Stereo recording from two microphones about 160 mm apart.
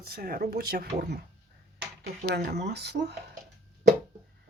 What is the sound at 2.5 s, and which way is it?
Speech, 90° right.